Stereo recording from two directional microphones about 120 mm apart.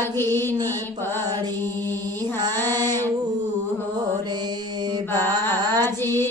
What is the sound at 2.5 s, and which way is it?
Child singing, 20° left (ahead or behind).